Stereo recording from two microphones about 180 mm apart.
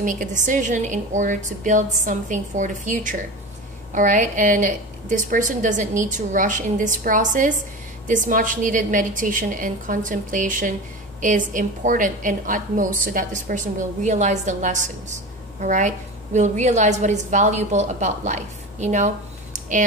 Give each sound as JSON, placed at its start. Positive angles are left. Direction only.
{"t": 0.0, "sound": "a woman's voice", "side_deg": -45}